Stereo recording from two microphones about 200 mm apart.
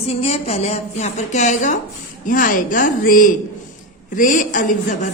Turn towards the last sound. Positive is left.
turn(degrees=40)  # may be behind; listen again after turning